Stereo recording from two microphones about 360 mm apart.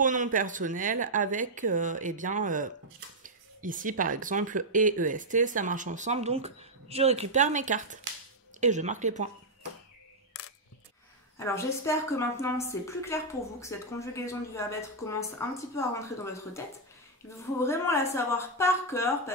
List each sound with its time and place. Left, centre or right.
0.0 s speech: right
11.3 s a woman's voice: centre